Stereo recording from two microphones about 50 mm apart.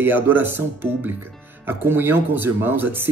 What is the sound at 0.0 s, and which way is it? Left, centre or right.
Speech, right.